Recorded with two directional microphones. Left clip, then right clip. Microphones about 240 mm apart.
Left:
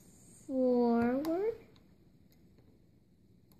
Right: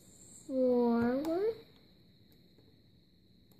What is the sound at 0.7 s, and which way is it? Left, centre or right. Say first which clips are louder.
Speech: left 1 dB; centre.